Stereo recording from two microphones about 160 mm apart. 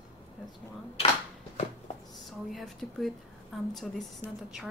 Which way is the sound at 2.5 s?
Centre (ahead or behind).